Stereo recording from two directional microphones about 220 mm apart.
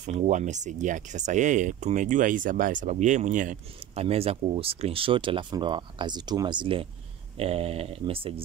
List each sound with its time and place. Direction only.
0.0 s speech: 35° right (ahead or behind)